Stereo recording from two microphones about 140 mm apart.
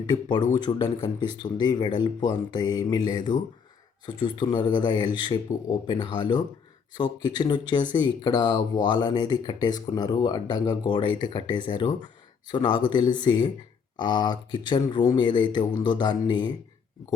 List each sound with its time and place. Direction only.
0.0 s speech: 30° left (ahead or behind)